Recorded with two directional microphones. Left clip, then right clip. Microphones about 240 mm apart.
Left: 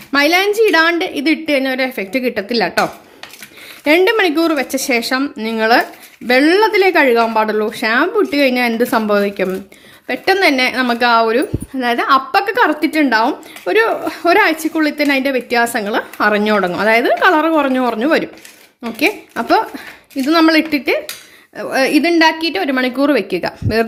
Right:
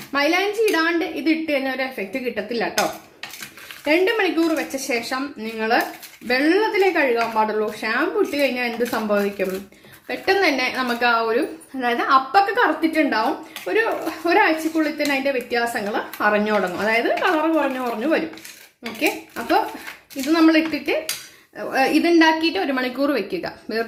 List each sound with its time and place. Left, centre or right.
0.1 s a woman's voice: left
3.8 s a woman's voice: left